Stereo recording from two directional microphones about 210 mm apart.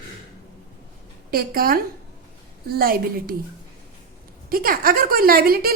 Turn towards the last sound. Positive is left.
turn(degrees=-45)  # may be behind; listen again after turning